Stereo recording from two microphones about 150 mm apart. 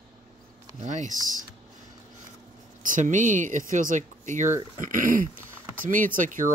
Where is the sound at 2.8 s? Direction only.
60° right (ahead or behind).